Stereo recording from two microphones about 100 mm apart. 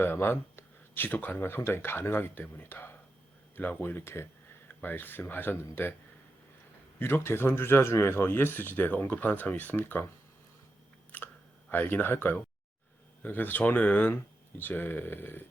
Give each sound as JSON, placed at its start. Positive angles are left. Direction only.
{"t": 0.0, "sound": "speech", "side_deg": 20}
{"t": 7.0, "sound": "speech", "side_deg": 25}
{"t": 11.1, "sound": "chewing", "side_deg": 15}
{"t": 11.7, "sound": "speech", "side_deg": 20}